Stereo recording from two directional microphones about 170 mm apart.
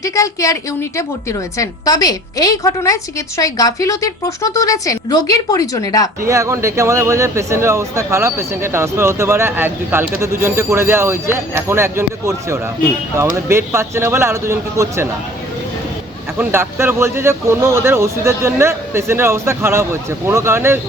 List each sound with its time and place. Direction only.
0.0 s a woman's voice: 20° left (ahead or behind)
6.2 s speech: 15° right (ahead or behind)
16.4 s speech: 15° right (ahead or behind)